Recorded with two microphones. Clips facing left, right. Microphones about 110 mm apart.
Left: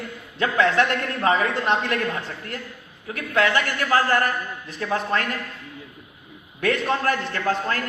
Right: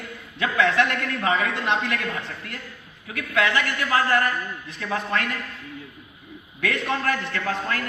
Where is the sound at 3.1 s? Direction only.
35° left (ahead or behind).